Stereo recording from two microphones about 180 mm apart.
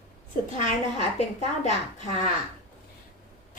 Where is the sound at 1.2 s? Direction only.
40° left (ahead or behind).